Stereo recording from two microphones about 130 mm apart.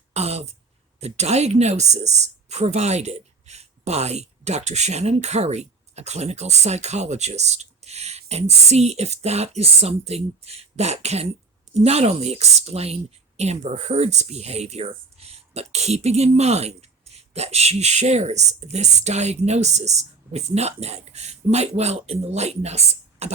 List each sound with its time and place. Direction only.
0.1 s throat clearing: 55° right (ahead or behind)
0.9 s speech: 55° right (ahead or behind)
23.2 s typing: 55° right (ahead or behind)